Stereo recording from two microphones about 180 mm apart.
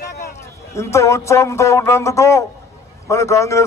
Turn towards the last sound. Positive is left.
turn(degrees=15)  # may be behind; listen again after turning